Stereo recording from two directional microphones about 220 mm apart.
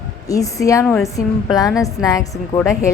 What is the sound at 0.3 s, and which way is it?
A woman's voice, 15° left (ahead or behind).